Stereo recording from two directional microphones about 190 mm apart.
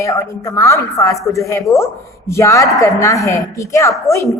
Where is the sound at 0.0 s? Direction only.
15° left (ahead or behind).